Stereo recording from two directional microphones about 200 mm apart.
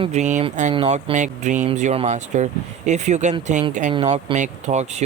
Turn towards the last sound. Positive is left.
turn(degrees=-35)  # may be behind; listen again after turning